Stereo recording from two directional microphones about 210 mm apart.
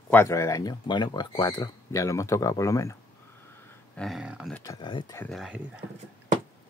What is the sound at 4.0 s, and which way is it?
Speech, centre (ahead or behind).